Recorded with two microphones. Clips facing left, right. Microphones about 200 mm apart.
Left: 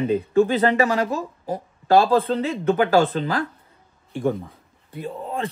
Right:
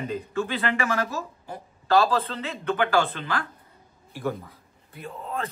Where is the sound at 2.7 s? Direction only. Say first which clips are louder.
Left 6 dB; 40° left (ahead or behind).